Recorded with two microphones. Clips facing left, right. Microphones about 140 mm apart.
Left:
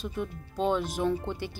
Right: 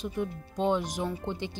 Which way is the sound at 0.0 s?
15° right (ahead or behind).